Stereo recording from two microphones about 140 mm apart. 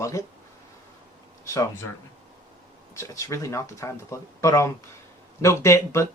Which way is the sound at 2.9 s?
20° left (ahead or behind).